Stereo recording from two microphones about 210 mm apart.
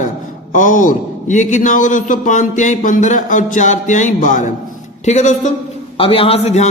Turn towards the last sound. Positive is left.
turn(degrees=30)  # may be behind; listen again after turning